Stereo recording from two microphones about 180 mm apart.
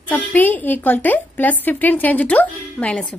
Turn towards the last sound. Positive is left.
turn(degrees=5)  # may be behind; listen again after turning